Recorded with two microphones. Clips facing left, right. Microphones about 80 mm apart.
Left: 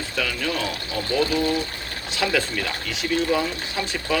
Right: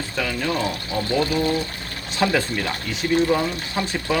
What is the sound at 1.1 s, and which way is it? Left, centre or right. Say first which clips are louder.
Speech: even; centre.